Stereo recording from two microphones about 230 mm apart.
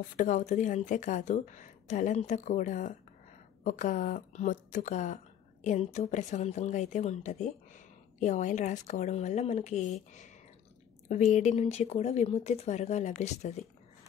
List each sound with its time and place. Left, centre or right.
0.1 s speech: left
11.1 s speech: left